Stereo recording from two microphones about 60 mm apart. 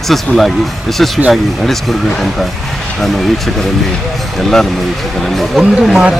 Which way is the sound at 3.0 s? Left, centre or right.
Centre.